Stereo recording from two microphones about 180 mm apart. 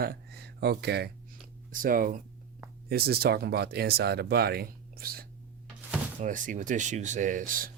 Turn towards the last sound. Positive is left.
turn(degrees=-50)  # may be behind; listen again after turning